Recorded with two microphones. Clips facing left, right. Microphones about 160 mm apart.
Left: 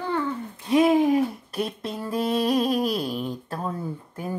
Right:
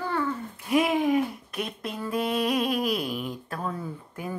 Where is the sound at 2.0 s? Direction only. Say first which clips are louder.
Left 3 dB; 35° left (ahead or behind).